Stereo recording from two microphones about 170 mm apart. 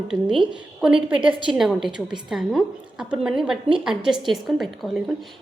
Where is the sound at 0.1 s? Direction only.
5° right (ahead or behind).